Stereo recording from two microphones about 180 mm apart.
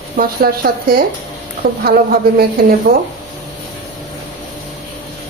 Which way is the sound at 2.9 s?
60° right (ahead or behind).